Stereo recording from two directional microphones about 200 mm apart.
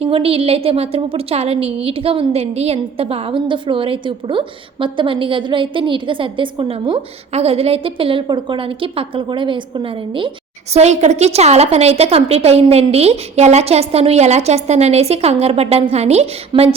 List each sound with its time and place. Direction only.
0.0 s a woman's voice: 30° right (ahead or behind)